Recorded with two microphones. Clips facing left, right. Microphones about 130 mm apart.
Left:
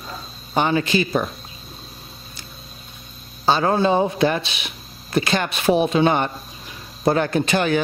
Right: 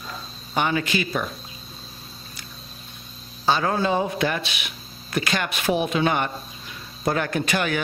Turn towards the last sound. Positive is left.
turn(degrees=30)  # may be behind; listen again after turning